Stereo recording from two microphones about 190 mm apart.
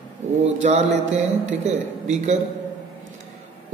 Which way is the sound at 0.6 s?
35° right (ahead or behind).